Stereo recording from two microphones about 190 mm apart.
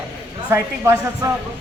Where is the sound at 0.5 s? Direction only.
15° right (ahead or behind).